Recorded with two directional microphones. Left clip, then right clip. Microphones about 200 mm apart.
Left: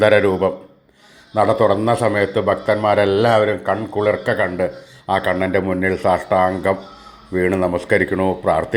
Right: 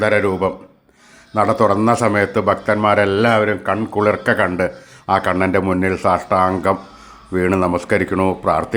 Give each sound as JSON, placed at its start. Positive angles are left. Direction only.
{"t": 0.0, "sound": "a man's voice", "side_deg": -5}